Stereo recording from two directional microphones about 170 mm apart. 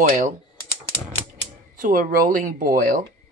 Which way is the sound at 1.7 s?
50° right (ahead or behind).